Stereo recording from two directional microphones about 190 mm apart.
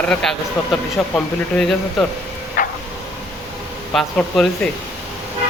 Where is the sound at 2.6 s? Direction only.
45° left (ahead or behind).